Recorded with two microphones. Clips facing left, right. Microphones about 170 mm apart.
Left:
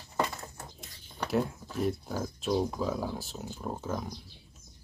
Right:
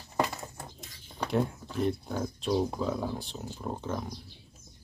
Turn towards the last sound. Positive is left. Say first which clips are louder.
# even
turn(degrees=5)  # may be behind; listen again after turning